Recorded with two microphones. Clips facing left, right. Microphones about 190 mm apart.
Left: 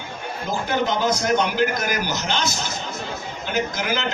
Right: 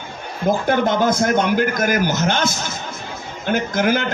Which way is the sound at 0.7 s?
50° right (ahead or behind).